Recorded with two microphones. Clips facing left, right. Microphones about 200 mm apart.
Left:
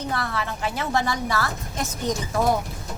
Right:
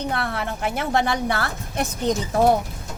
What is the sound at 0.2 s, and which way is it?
A woman's voice, 55° right (ahead or behind).